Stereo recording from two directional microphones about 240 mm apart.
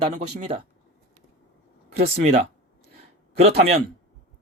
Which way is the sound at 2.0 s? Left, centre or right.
Right.